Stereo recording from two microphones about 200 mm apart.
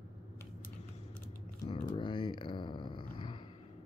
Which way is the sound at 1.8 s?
25° left (ahead or behind).